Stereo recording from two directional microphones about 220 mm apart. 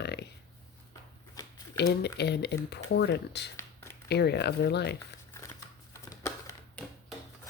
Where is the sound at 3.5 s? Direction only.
10° left (ahead or behind).